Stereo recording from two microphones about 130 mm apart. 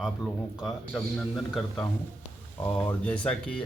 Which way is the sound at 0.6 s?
5° left (ahead or behind).